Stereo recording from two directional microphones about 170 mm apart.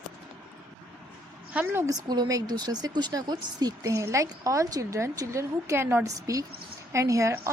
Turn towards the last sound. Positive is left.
turn(degrees=-15)  # may be behind; listen again after turning